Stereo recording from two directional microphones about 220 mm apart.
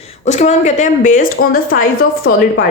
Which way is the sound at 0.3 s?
30° left (ahead or behind).